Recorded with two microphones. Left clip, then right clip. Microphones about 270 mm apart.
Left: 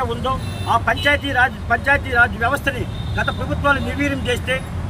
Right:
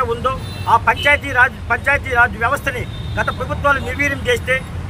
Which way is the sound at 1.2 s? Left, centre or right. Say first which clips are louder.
Right 3 dB; centre.